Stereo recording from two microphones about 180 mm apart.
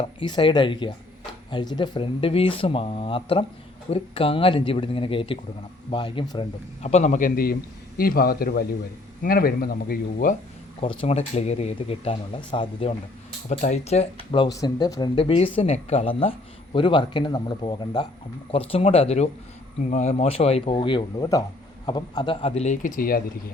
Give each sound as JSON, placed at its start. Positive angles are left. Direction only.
{"t": 0.0, "sound": "speech", "side_deg": 25}
{"t": 10.8, "sound": "speech", "side_deg": 35}
{"t": 13.5, "sound": "speech", "side_deg": 40}
{"t": 14.3, "sound": "speech", "side_deg": 25}